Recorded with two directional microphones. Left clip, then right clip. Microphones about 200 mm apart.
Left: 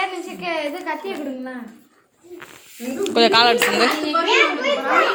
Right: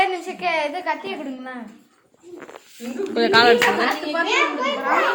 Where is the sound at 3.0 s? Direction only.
5° left (ahead or behind).